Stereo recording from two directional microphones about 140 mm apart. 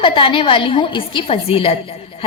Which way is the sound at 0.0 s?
40° left (ahead or behind).